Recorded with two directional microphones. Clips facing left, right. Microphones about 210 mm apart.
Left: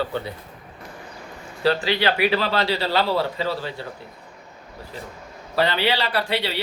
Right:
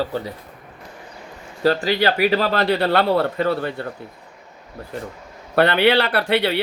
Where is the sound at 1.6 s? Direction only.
45° right (ahead or behind).